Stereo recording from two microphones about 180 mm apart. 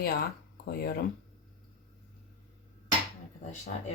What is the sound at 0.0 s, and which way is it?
Speech, 60° left (ahead or behind).